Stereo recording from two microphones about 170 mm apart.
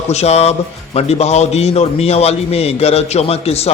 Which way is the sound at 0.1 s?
40° left (ahead or behind).